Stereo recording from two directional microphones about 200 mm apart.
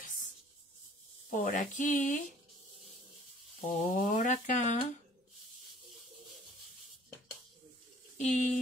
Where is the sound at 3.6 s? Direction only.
35° left (ahead or behind).